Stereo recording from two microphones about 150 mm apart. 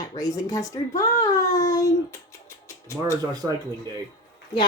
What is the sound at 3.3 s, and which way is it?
Speech, 25° right (ahead or behind).